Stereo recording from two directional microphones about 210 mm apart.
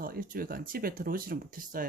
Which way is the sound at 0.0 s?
45° right (ahead or behind).